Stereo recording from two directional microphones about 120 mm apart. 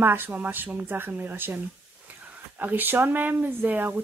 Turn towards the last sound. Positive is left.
turn(degrees=-15)  # may be behind; listen again after turning